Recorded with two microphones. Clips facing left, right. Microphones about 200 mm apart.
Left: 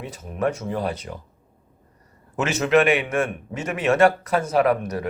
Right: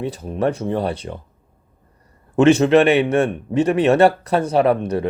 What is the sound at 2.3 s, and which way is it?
A man's voice, 30° right (ahead or behind).